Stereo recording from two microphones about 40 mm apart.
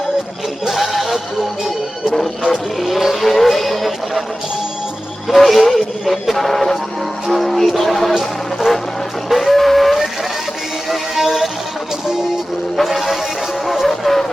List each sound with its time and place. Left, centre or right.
0.7 s music: centre
2.8 s speech: centre
5.3 s speech: centre
9.3 s a sound: centre
10.8 s music: centre
12.7 s speech: centre
13.7 s music: centre